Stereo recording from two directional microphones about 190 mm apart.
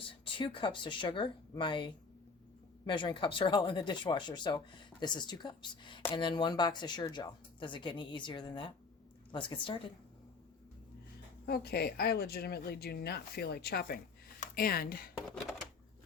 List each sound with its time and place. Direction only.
0.1 s speech: 25° left (ahead or behind)
11.4 s speech: 55° left (ahead or behind)